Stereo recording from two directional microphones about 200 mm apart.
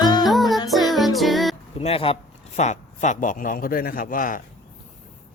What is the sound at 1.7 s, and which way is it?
Speech, 30° left (ahead or behind).